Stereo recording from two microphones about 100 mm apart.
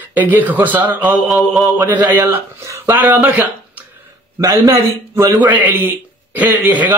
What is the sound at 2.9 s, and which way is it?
Speech, 20° right (ahead or behind).